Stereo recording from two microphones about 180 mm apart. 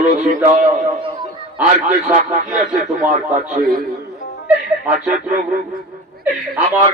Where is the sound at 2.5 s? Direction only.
45° right (ahead or behind).